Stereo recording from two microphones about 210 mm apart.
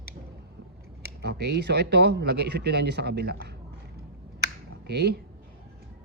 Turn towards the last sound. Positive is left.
turn(degrees=-50)  # may be behind; listen again after turning